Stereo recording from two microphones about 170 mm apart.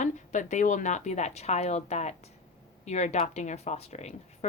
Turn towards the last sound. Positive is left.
turn(degrees=40)  # may be behind; listen again after turning